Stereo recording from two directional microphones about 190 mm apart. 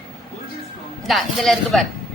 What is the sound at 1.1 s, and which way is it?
Speech, centre (ahead or behind).